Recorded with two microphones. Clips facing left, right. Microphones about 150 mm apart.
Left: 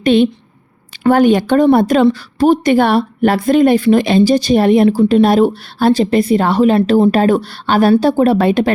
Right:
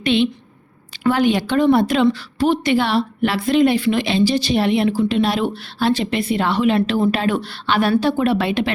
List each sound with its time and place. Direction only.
0.0 s a woman's voice: 45° left (ahead or behind)